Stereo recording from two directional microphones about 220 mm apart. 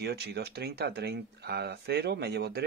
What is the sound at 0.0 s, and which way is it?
A man's voice, 50° right (ahead or behind).